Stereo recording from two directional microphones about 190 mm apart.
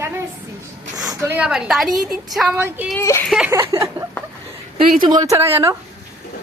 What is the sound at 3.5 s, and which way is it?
A woman's voice, 15° right (ahead or behind).